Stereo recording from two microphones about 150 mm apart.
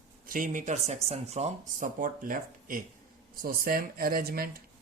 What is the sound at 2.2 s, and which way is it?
Speech, 65° right (ahead or behind).